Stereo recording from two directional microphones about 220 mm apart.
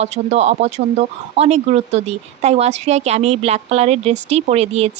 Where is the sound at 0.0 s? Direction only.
30° right (ahead or behind).